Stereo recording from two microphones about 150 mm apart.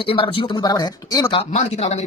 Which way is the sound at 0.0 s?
35° left (ahead or behind).